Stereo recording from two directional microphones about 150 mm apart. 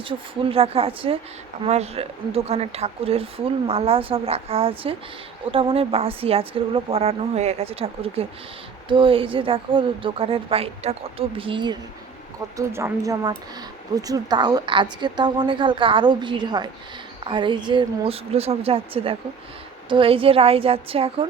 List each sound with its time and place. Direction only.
0.1 s speech: 40° right (ahead or behind)
12.5 s a woman's voice: 20° right (ahead or behind); by 21.2 s 40° right (ahead or behind)